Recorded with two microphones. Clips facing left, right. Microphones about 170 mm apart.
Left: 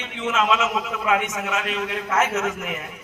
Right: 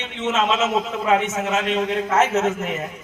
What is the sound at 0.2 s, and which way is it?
A man's voice, 25° right (ahead or behind).